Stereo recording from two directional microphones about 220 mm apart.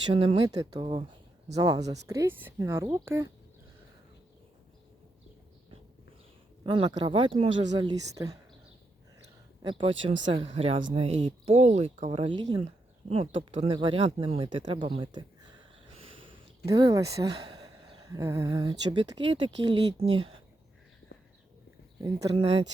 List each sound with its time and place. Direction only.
0.1 s speech: 25° right (ahead or behind)
6.7 s speech: 25° right (ahead or behind)
9.6 s speech: 20° right (ahead or behind)
16.3 s speech: 15° right (ahead or behind)
22.0 s speech: 15° right (ahead or behind)